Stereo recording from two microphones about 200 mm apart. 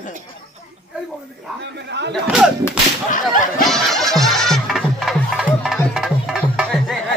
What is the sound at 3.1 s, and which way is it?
Whip, 40° left (ahead or behind).